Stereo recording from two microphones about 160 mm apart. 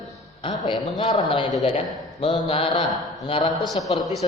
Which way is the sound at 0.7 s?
25° left (ahead or behind).